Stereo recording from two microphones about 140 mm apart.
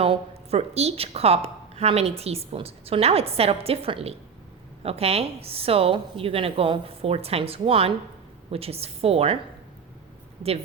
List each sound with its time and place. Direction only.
0.0 s a woman's voice: 45° right (ahead or behind)